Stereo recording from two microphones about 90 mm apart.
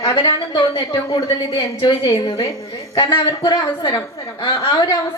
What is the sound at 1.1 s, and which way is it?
A woman's voice, 55° left (ahead or behind).